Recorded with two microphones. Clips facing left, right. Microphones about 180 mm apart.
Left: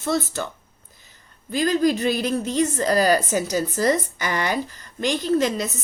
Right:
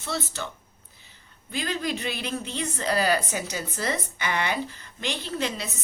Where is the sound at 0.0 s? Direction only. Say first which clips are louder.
Left 8 dB; 45° left (ahead or behind).